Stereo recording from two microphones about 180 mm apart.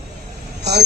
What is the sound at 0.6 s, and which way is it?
Speech, 65° right (ahead or behind).